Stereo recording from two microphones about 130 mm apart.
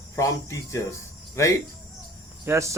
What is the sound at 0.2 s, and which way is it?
Speech, 25° left (ahead or behind).